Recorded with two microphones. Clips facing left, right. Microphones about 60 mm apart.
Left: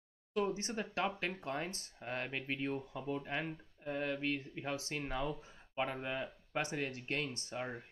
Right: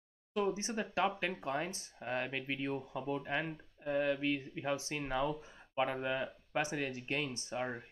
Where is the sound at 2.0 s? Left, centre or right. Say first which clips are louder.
Right 3 dB; centre.